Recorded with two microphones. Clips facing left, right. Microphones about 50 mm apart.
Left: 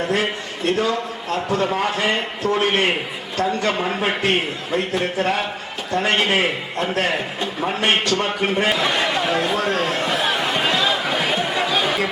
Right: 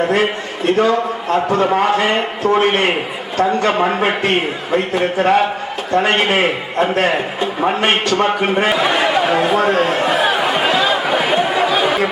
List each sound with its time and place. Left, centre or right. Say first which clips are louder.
0.0 s a man's voice: right 6 dB; centre
3.8 s a man's voice: right 6 dB; right
8.2 s a sound: right 5 dB; centre